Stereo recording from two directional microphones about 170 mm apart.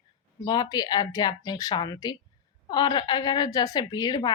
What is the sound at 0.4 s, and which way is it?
A woman's voice, 25° left (ahead or behind).